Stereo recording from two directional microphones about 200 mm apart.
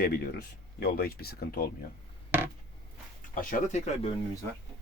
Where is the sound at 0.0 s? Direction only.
50° left (ahead or behind).